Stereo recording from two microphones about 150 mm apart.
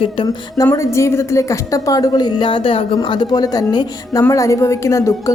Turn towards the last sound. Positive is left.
turn(degrees=20)  # may be behind; listen again after turning